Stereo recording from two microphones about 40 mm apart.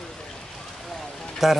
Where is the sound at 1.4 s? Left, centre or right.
Centre.